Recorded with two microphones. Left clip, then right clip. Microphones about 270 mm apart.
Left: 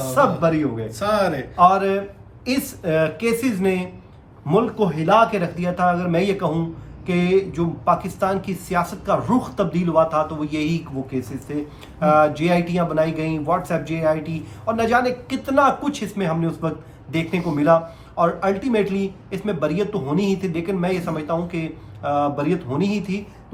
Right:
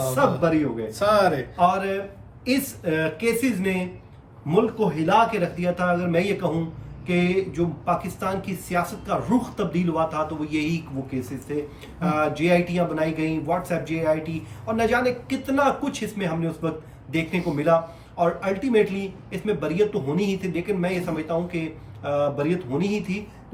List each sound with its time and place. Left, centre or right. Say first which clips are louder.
0.1 s a man's voice: left 5 dB; centre
0.9 s speech: right 1 dB; centre
1.5 s a man's voice: left 10 dB; centre